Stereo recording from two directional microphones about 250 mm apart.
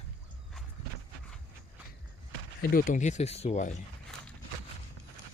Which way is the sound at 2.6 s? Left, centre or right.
Left.